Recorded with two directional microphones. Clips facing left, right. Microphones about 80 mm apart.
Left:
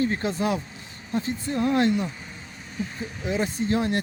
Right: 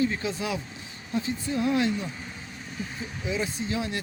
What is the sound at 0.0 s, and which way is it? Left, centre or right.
Speech, left.